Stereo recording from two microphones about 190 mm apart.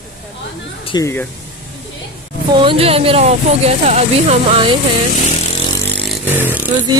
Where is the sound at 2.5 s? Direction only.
30° right (ahead or behind).